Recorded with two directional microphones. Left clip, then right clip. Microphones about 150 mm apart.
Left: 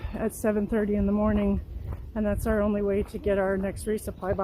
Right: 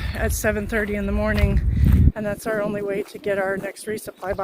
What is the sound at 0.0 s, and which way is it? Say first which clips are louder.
Speech: right 5 dB; 15° left (ahead or behind).